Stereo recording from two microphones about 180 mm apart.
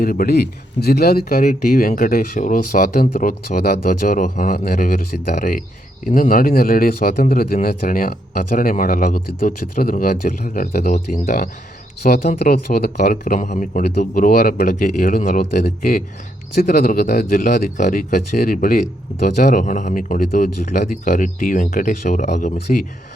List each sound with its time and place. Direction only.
0.0 s speech: 55° left (ahead or behind)
10.8 s speech: 40° left (ahead or behind)
12.0 s speech: 60° left (ahead or behind)
16.6 s speech: 40° left (ahead or behind)